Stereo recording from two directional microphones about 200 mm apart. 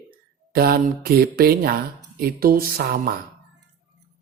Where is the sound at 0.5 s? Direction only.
50° right (ahead or behind).